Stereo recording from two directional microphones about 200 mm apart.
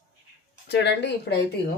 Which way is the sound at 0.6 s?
60° left (ahead or behind).